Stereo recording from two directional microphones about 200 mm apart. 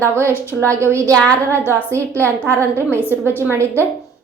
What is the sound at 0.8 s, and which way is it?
Speech, 15° right (ahead or behind).